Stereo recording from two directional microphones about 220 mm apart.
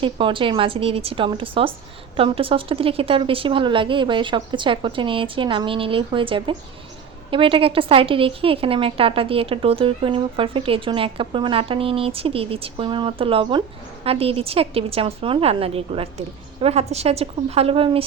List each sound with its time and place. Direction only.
0.0 s a woman's voice: 25° right (ahead or behind)